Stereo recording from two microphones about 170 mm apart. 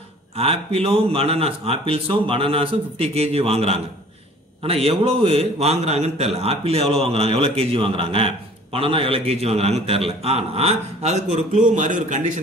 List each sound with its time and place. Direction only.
0.4 s a man's voice: 35° right (ahead or behind)